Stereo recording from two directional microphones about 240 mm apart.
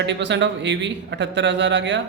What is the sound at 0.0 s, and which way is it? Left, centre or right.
A man's voice, right.